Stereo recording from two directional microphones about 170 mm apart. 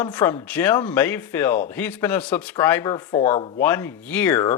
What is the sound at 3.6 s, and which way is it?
Speech, 15° left (ahead or behind).